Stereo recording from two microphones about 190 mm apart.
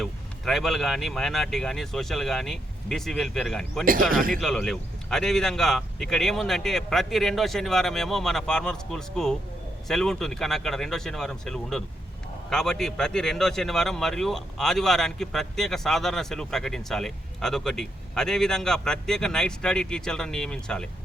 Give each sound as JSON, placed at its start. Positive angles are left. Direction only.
{"t": 0.0, "sound": "a man's voice", "side_deg": 0}
{"t": 3.8, "sound": "speech", "side_deg": -45}
{"t": 4.4, "sound": "a man's voice", "side_deg": 0}